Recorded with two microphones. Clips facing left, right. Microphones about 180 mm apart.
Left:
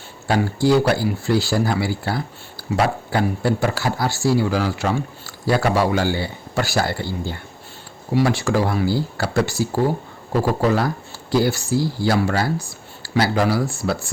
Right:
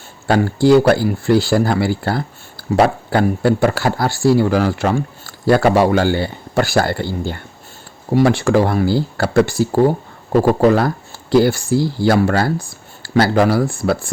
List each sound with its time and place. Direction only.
0.3 s speech: 60° right (ahead or behind)